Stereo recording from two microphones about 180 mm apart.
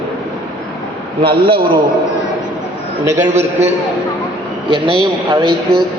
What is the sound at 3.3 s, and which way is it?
Speech, 40° right (ahead or behind).